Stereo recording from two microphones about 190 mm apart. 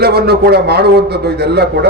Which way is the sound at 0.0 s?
55° right (ahead or behind).